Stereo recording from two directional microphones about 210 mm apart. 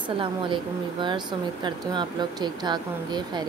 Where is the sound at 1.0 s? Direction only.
20° right (ahead or behind).